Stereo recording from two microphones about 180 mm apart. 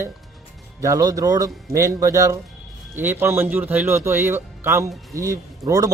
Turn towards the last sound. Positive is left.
turn(degrees=-20)  # may be behind; listen again after turning